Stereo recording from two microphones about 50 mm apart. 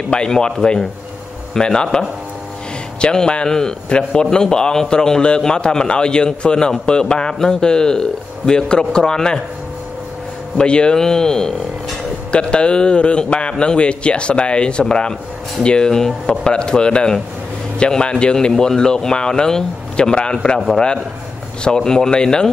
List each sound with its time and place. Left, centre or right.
0.1 s a man's voice: centre
10.6 s a man's voice: centre
21.6 s a man's voice: centre